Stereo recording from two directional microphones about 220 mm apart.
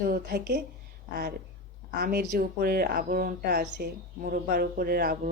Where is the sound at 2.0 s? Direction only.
45° right (ahead or behind).